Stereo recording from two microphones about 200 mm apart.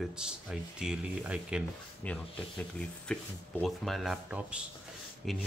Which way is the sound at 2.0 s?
5° left (ahead or behind).